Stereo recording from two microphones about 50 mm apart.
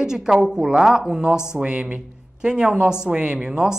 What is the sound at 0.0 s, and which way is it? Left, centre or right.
Speech, centre.